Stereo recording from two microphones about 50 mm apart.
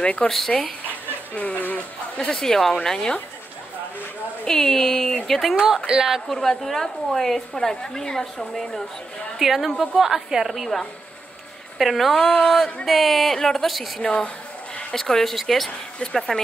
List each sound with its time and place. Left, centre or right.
0.0 s a woman's voice: left
0.3 s a woman's voice: centre
1.3 s speech: left
2.1 s a woman's voice: centre
4.5 s a woman's voice: centre
5.9 s speech: centre
6.3 s a woman's voice: centre
9.4 s a woman's voice: centre
11.8 s a woman's voice: centre
14.0 s a woman's voice: left; by 15.7 s centre
16.0 s a woman's voice: centre